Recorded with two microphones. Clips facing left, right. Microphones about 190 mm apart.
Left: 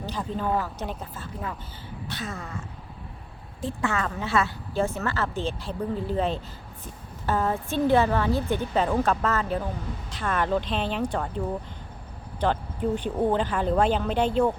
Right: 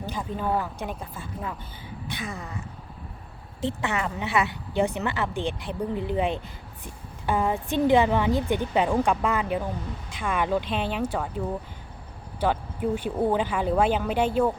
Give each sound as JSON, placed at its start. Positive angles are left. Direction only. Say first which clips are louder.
{"t": 0.1, "sound": "a woman's voice", "louder": "even", "side_deg": -10}